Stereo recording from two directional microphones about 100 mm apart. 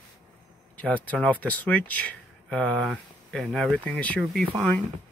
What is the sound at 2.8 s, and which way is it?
Speech, centre (ahead or behind).